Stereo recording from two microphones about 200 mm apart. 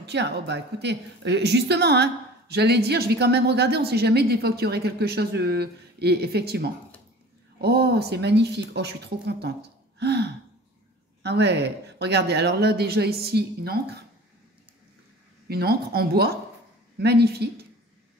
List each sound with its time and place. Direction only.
0.0 s a woman's voice: 60° right (ahead or behind)
15.4 s speech: 50° right (ahead or behind)